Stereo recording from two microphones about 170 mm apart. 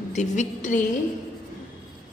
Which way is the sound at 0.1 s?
45° left (ahead or behind).